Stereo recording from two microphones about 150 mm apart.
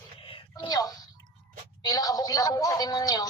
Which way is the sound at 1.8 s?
25° left (ahead or behind).